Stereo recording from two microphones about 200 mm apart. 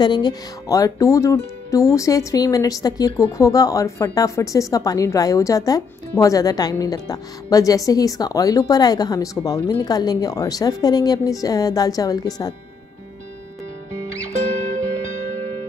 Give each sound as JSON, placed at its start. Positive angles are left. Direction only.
{"t": 0.0, "sound": "a woman's voice", "side_deg": 20}